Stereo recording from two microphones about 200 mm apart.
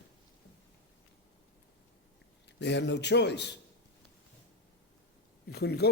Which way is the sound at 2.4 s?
60° left (ahead or behind).